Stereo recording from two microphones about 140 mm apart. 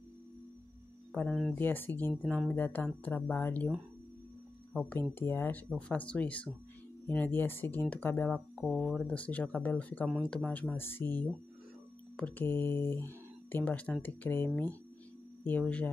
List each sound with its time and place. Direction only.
1.5 s speech: 15° left (ahead or behind)
2.2 s speech: 5° left (ahead or behind)
2.5 s speech: 15° left (ahead or behind)
4.7 s speech: 15° left (ahead or behind)